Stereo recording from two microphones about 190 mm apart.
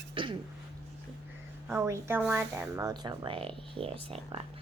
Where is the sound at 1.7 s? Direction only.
15° right (ahead or behind).